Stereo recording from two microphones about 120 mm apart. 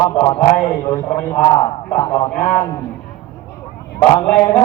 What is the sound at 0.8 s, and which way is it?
A man's voice, 20° left (ahead or behind).